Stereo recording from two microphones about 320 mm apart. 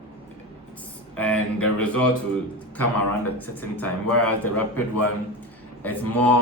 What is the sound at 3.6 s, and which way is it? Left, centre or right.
A man's voice, centre.